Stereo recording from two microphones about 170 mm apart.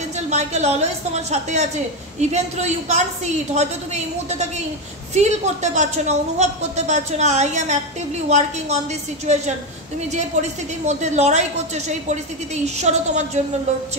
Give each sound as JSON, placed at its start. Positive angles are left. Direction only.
{"t": 0.3, "sound": "a woman's voice", "side_deg": -40}
{"t": 9.3, "sound": "a woman's voice", "side_deg": -40}